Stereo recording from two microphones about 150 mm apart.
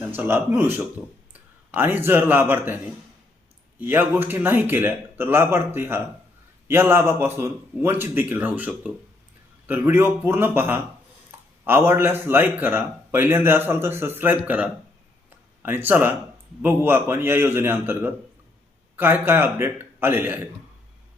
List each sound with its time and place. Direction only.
0.1 s a man's voice: 15° right (ahead or behind)
3.8 s a man's voice: 15° right (ahead or behind)